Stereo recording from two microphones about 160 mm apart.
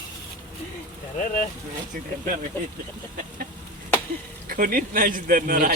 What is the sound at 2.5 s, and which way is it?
Speech, 15° left (ahead or behind).